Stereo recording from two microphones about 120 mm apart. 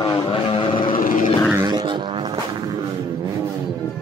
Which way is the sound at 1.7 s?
35° right (ahead or behind).